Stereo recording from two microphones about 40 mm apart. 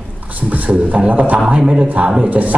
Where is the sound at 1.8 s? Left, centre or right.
Right.